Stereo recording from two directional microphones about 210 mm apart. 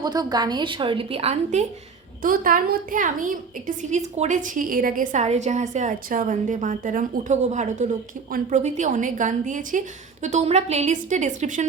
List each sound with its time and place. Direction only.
0.0 s a woman's voice: 20° right (ahead or behind); by 11.6 s 35° right (ahead or behind)